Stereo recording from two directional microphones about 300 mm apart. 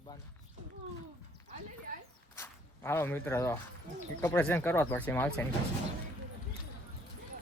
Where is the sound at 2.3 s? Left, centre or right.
Centre.